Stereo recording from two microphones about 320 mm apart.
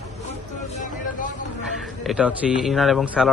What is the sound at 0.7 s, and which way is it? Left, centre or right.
Vehicle, left.